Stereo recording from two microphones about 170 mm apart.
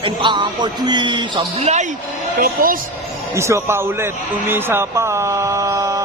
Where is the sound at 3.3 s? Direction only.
15° right (ahead or behind).